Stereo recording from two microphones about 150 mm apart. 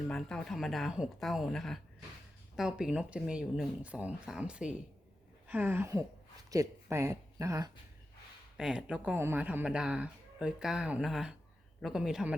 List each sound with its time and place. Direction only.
0.1 s speech: 5° left (ahead or behind); by 7.7 s 20° right (ahead or behind)
8.5 s speech: 5° right (ahead or behind)